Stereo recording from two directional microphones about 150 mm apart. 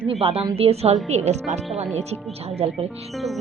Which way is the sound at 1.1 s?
50° right (ahead or behind).